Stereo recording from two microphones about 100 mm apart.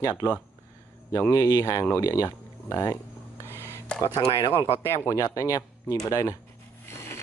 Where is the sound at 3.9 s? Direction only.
10° left (ahead or behind).